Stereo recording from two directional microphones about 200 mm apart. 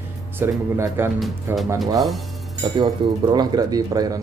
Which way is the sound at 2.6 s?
20° right (ahead or behind).